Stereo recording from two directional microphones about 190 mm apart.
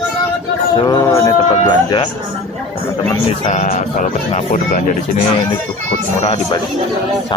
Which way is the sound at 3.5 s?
40° left (ahead or behind).